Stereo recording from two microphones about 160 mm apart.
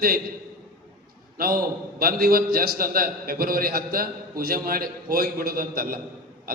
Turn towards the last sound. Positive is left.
turn(degrees=-65)  # may be behind; listen again after turning